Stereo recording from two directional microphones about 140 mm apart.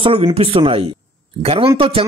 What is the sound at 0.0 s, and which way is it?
A man's voice, 45° right (ahead or behind).